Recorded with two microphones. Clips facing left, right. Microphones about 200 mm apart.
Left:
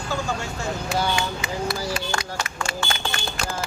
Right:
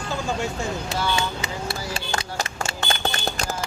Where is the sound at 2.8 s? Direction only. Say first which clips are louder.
Right 4 dB; 40° right (ahead or behind).